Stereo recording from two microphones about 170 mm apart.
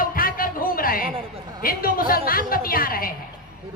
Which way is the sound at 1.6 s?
60° left (ahead or behind).